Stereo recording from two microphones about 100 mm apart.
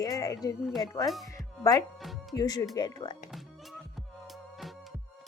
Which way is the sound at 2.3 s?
40° left (ahead or behind).